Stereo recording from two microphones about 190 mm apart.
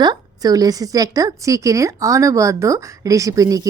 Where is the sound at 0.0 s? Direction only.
20° right (ahead or behind).